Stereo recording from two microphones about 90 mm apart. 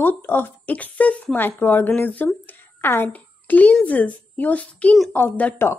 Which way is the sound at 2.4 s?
25° left (ahead or behind).